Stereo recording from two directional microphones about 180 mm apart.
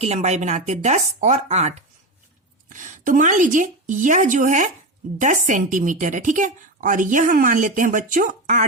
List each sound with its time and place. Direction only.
0.0 s a woman's voice: 35° right (ahead or behind)